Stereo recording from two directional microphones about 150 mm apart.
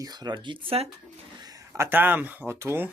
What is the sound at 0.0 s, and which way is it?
Speech, 25° right (ahead or behind).